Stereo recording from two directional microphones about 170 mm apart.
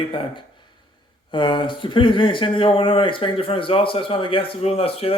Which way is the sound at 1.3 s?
30° left (ahead or behind).